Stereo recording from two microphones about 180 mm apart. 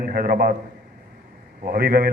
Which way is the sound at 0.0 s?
55° right (ahead or behind).